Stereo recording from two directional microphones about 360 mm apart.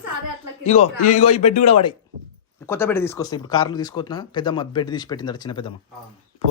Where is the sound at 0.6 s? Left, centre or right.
Centre.